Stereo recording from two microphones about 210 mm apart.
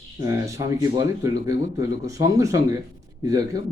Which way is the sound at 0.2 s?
15° right (ahead or behind).